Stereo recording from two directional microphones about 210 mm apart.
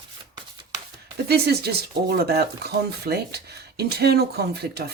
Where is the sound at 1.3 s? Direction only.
50° right (ahead or behind).